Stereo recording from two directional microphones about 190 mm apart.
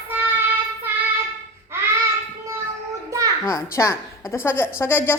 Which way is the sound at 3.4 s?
15° left (ahead or behind).